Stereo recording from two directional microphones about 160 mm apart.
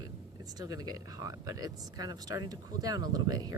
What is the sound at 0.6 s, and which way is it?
Speech, 25° right (ahead or behind).